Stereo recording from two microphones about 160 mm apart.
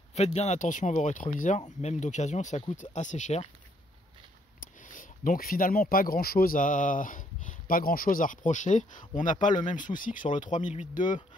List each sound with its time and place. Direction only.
0.1 s speech: 45° left (ahead or behind)
4.8 s speech: 55° left (ahead or behind)
11.0 s speech: 30° left (ahead or behind)